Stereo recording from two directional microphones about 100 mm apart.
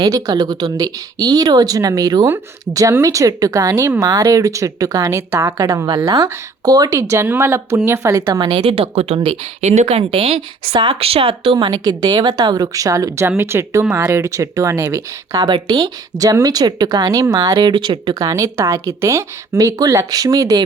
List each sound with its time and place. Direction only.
0.0 s a woman's voice: 40° right (ahead or behind)
2.7 s a woman's voice: 30° right (ahead or behind)
8.4 s speech: 55° right (ahead or behind)
11.6 s a woman's voice: 45° right (ahead or behind)
15.4 s a woman's voice: 50° right (ahead or behind)